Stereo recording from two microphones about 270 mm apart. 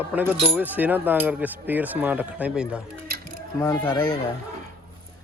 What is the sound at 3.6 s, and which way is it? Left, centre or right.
Speech, centre.